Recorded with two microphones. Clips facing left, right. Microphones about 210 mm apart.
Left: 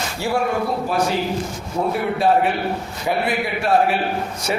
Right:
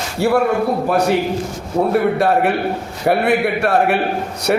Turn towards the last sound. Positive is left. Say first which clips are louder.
# right 3 dB
turn(degrees=-65)  # may be behind; listen again after turning